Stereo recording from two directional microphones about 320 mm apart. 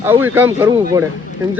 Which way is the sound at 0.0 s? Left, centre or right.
Centre.